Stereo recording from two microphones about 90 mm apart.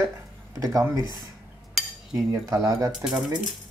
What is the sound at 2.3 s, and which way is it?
Speech, 40° right (ahead or behind).